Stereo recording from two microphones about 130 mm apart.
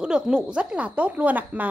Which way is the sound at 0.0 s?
5° right (ahead or behind).